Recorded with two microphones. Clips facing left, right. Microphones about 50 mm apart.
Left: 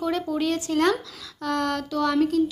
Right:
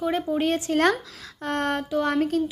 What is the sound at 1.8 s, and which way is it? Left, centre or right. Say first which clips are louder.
Speech: right 1 dB; right.